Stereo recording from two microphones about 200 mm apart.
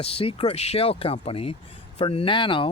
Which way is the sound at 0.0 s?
30° left (ahead or behind).